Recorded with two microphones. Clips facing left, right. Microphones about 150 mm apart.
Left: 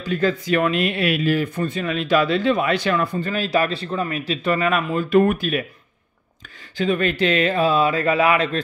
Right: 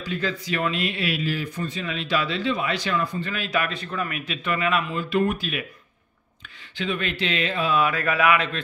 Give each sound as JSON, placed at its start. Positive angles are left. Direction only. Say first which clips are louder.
{"t": 0.1, "sound": "speech", "louder": "left 8 dB", "side_deg": 50}
{"t": 3.3, "sound": "a man's voice", "louder": "left 6 dB", "side_deg": 35}
{"t": 6.8, "sound": "a man's voice", "louder": "left 7 dB", "side_deg": 45}